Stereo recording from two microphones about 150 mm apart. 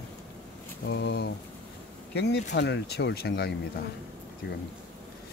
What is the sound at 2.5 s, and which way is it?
Speech, 90° left.